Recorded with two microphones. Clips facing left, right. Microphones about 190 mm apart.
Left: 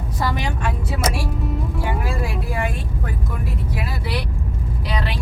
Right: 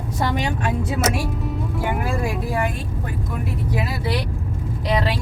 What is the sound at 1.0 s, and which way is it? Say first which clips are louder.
Speech: right 1 dB; centre (ahead or behind).